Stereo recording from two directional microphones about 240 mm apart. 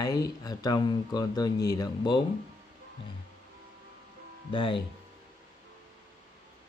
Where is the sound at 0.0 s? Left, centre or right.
Centre.